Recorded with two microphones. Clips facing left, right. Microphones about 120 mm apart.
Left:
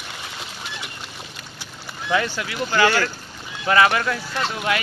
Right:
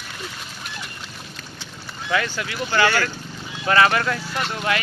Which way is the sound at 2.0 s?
15° left (ahead or behind).